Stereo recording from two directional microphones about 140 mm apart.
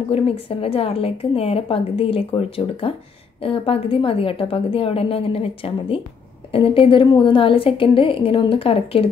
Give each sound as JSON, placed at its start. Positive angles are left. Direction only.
{"t": 0.1, "sound": "a woman's voice", "side_deg": 45}